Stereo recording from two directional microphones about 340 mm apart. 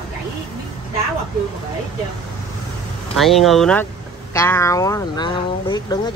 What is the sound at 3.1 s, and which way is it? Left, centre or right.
Speech, centre.